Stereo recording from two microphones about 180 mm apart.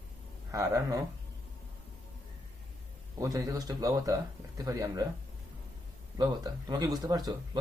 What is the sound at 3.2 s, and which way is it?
Speech, 20° right (ahead or behind).